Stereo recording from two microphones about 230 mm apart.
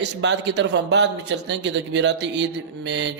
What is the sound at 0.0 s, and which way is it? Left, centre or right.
Speech, right.